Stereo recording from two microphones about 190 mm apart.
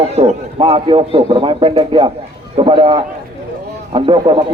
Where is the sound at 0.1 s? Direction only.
35° right (ahead or behind).